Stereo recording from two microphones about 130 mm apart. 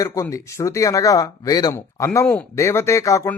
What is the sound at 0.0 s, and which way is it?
Speech, 25° left (ahead or behind).